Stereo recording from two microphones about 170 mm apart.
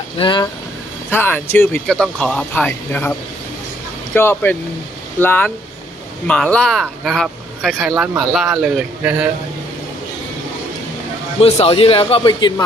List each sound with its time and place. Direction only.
0.2 s speech: 30° left (ahead or behind)
1.1 s speech: 10° left (ahead or behind)
4.1 s speech: 15° left (ahead or behind); by 9.3 s 5° right (ahead or behind)
11.3 s a man's voice: 35° left (ahead or behind)